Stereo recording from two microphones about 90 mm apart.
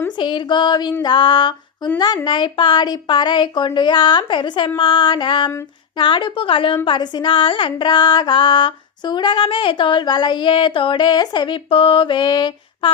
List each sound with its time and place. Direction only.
0.2 s music: 60° left (ahead or behind)
1.0 s a sound: 60° left (ahead or behind)
2.2 s music: 60° left (ahead or behind)
6.0 s a woman's voice: 65° left (ahead or behind)
6.8 s music: 55° left (ahead or behind)